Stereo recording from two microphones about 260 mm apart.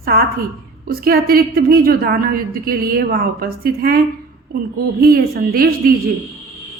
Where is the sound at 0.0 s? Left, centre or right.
Right.